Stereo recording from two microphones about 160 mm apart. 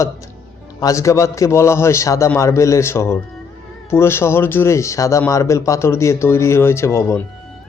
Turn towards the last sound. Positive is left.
turn(degrees=15)  # may be behind; listen again after turning